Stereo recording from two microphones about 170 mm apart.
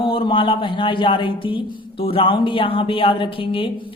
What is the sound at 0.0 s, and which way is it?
Speech, 30° left (ahead or behind).